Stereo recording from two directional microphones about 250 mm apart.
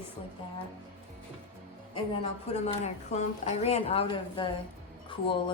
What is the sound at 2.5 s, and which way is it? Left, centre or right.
A woman's voice, left.